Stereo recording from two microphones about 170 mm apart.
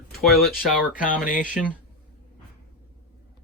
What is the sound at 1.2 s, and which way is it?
Speech, 50° left (ahead or behind).